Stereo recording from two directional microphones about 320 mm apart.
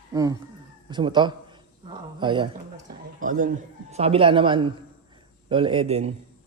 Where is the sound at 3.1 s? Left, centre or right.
Right.